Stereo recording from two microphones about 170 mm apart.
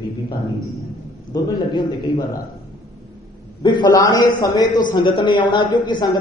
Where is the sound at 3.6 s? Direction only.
25° left (ahead or behind).